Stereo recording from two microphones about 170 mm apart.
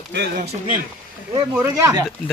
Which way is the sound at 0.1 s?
75° right (ahead or behind).